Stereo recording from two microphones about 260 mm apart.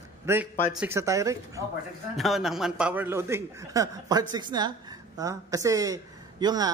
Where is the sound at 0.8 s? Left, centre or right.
Centre.